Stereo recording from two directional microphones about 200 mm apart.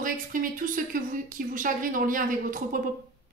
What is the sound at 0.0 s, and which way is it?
A woman's voice, 45° right (ahead or behind).